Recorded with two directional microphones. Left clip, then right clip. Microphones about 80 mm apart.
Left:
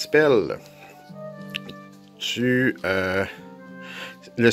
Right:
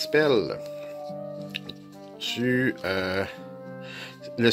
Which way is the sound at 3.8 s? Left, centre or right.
Left.